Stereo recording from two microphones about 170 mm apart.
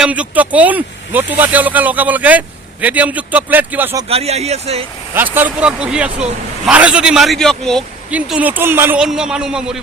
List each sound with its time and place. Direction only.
0.0 s speech: 10° right (ahead or behind)
4.1 s speech: 35° right (ahead or behind)
5.1 s a man's voice: 10° right (ahead or behind)
8.1 s a man's voice: 10° right (ahead or behind)